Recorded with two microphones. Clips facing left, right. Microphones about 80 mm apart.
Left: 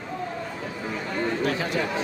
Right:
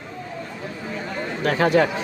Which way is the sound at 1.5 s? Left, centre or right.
Right.